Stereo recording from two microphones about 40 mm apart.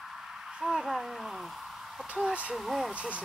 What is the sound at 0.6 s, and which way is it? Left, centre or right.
Speech, centre.